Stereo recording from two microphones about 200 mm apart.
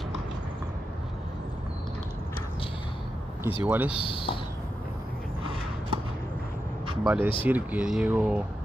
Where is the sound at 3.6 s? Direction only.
10° right (ahead or behind).